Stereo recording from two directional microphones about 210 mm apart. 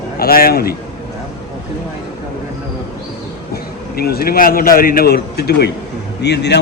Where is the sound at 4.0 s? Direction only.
45° left (ahead or behind).